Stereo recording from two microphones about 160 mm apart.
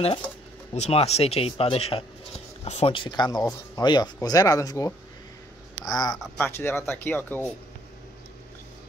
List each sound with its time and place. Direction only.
0.7 s speech: 40° left (ahead or behind); by 6.1 s 25° left (ahead or behind)
6.1 s speech: centre (ahead or behind)
6.4 s speech: 15° left (ahead or behind)